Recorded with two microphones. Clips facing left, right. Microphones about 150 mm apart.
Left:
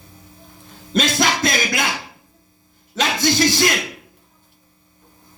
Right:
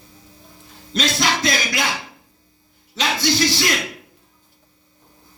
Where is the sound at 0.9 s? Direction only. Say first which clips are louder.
Left 2 dB; 50° left (ahead or behind).